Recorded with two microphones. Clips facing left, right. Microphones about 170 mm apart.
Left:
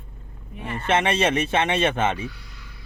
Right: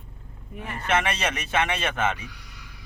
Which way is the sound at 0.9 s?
25° left (ahead or behind).